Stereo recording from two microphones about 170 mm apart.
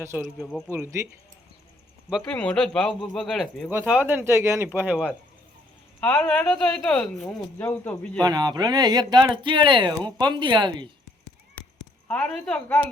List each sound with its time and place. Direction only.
0.0 s speech: 15° right (ahead or behind)
2.0 s speech: 5° right (ahead or behind)
6.0 s speech: 10° left (ahead or behind)
8.2 s speech: 25° right (ahead or behind)
12.0 s a woman's voice: 5° left (ahead or behind)